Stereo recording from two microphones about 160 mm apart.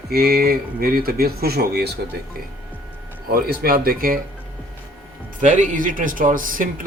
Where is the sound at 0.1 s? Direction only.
70° right (ahead or behind); by 2.0 s 90° right.